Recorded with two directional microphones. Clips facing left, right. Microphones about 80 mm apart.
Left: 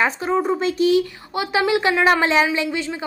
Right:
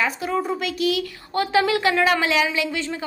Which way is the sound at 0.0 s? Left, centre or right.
Left.